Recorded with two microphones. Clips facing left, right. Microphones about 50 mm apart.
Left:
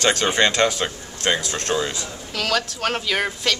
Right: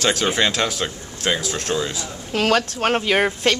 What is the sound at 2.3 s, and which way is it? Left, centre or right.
A woman's voice, right.